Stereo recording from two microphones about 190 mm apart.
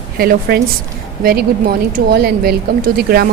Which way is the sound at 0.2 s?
55° right (ahead or behind).